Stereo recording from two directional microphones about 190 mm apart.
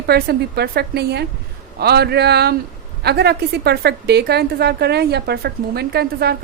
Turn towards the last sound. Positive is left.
turn(degrees=-55)  # may be behind; listen again after turning